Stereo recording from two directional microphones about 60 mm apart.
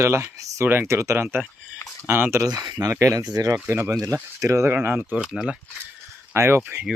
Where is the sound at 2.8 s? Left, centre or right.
Right.